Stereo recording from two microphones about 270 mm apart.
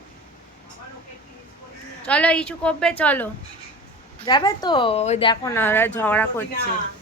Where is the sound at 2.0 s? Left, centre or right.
Centre.